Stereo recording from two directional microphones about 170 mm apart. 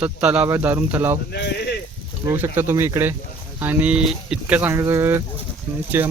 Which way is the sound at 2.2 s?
15° right (ahead or behind).